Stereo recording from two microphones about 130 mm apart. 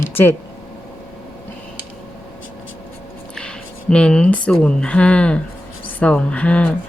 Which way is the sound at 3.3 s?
5° left (ahead or behind).